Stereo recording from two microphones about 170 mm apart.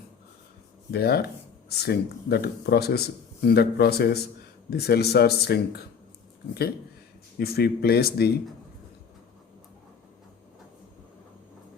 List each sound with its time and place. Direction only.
0.9 s speech: 70° left (ahead or behind)
7.3 s speech: 65° left (ahead or behind)